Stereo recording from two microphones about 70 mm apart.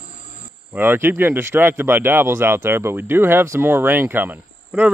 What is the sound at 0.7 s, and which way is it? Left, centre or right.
Speech, right.